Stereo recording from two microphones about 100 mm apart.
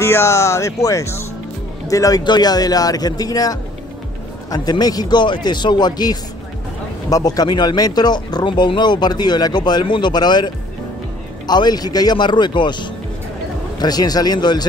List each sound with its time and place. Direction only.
0.0 s speech: 25° left (ahead or behind); by 14.7 s 45° left (ahead or behind)